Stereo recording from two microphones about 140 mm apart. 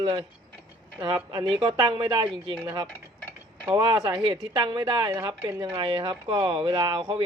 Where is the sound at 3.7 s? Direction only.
35° right (ahead or behind).